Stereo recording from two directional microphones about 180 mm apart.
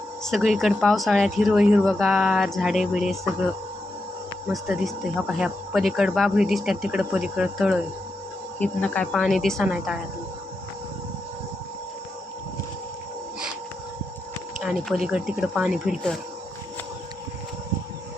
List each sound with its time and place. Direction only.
0.3 s speech: centre (ahead or behind)
8.5 s speech: 5° left (ahead or behind)
14.6 s speech: centre (ahead or behind)